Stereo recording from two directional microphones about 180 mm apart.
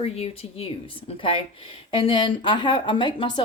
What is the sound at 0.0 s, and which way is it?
Speech, 35° left (ahead or behind).